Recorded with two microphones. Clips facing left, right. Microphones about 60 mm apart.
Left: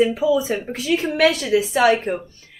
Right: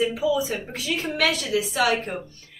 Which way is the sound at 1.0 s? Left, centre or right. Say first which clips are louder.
Left 6 dB; left.